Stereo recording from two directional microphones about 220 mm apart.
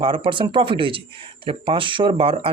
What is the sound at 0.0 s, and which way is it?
Speech, 25° right (ahead or behind).